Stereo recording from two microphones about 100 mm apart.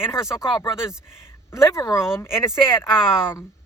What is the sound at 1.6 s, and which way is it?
Speech, 30° left (ahead or behind).